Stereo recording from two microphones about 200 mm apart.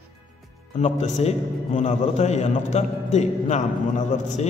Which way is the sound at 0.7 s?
35° left (ahead or behind).